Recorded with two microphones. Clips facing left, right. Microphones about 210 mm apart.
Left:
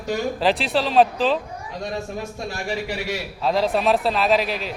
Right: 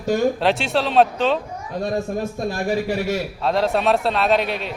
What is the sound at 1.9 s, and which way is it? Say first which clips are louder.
A man's voice: right 6 dB; 50° right (ahead or behind).